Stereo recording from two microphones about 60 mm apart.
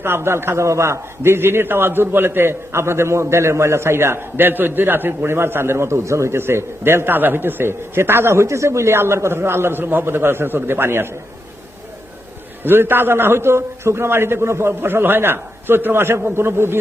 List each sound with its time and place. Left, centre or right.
0.0 s a man's voice: right
12.6 s a man's voice: right